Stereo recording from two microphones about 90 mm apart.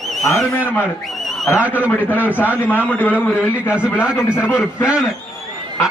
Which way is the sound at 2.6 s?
20° left (ahead or behind).